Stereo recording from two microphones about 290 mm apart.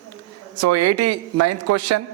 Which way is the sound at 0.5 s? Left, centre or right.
Right.